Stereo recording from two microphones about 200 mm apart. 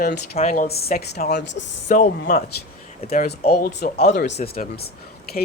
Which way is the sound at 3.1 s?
50° left (ahead or behind).